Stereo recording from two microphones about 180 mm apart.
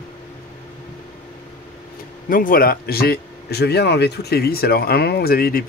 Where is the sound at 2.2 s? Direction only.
50° left (ahead or behind).